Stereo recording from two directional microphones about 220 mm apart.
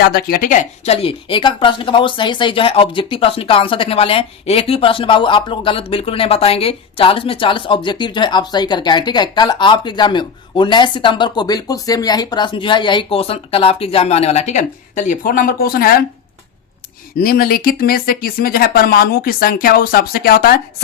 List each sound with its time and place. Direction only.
0.0 s a woman's voice: 45° left (ahead or behind)
17.2 s speech: 40° left (ahead or behind)